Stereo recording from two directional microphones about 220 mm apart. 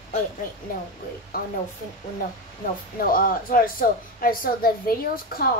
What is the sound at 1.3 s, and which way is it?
Speech, 40° left (ahead or behind).